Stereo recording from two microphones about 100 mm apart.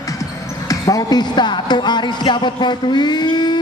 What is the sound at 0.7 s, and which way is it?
A woman's voice, 35° left (ahead or behind).